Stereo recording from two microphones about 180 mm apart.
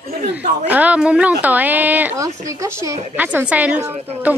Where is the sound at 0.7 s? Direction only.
5° right (ahead or behind).